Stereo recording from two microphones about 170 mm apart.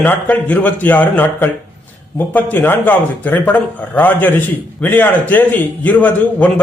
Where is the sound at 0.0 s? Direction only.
10° left (ahead or behind).